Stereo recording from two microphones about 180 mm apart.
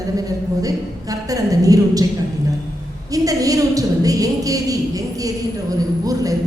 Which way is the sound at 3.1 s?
20° right (ahead or behind).